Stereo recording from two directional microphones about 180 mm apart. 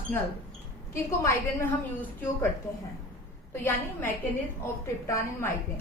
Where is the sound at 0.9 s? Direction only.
15° left (ahead or behind).